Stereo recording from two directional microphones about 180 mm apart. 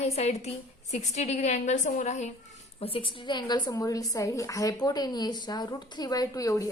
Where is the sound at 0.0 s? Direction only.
35° left (ahead or behind).